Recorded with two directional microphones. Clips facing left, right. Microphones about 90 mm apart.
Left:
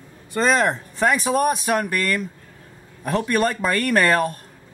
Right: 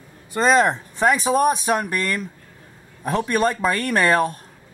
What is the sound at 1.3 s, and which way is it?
Speech, 15° right (ahead or behind).